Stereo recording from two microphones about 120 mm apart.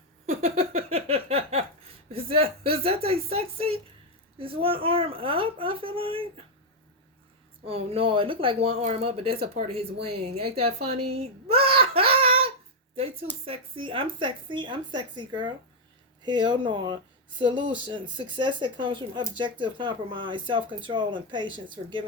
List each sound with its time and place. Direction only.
0.3 s a sound: 60° right (ahead or behind)
2.1 s speech: 55° right (ahead or behind)
7.6 s a woman's voice: 55° right (ahead or behind)